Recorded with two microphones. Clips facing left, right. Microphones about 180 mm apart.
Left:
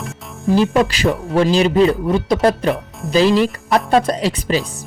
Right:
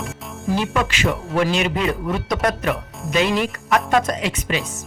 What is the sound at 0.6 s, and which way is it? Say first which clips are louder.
Speech: left 7 dB; 35° left (ahead or behind).